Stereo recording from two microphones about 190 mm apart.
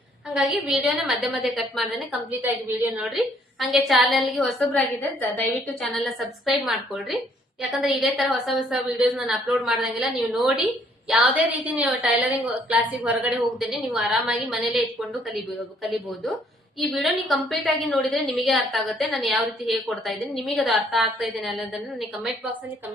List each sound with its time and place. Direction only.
0.3 s a woman's voice: 5° right (ahead or behind)